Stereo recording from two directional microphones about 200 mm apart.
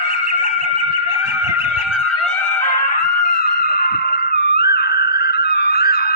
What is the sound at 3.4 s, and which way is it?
Music, 50° left (ahead or behind).